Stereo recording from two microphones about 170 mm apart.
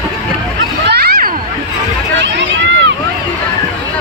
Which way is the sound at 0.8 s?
70° right (ahead or behind).